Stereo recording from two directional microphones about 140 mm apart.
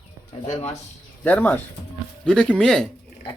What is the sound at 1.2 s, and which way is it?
Speech, 10° left (ahead or behind).